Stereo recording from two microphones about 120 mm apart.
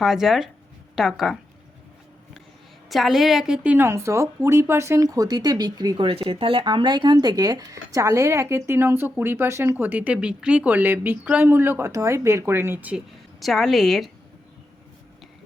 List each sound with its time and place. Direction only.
0.0 s a woman's voice: centre (ahead or behind)
2.9 s speech: centre (ahead or behind); by 6.1 s 35° right (ahead or behind)
6.1 s a woman's voice: 45° right (ahead or behind); by 13.0 s 15° right (ahead or behind)
13.4 s a woman's voice: centre (ahead or behind)